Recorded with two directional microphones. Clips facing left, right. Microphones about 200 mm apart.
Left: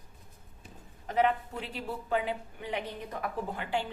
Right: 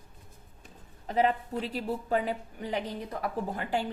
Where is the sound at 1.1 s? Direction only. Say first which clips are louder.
Right 1 dB; 35° right (ahead or behind).